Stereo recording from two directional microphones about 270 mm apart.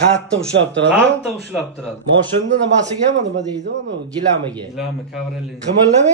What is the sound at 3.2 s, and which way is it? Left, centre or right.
Speech, right.